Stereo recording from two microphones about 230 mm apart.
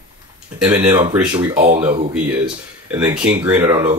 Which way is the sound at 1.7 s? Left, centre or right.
Right.